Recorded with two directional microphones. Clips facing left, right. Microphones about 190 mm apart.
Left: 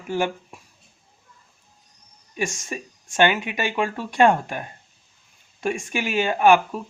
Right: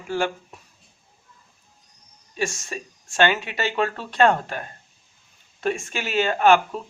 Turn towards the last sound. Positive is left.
turn(degrees=15)  # may be behind; listen again after turning